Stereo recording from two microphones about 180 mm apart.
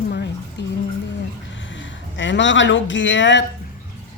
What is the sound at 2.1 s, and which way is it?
Speech, 90° left.